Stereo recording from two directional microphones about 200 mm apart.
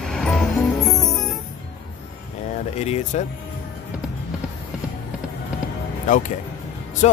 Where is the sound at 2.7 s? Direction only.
35° left (ahead or behind).